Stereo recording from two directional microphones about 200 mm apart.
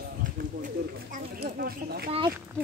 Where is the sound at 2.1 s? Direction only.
25° right (ahead or behind).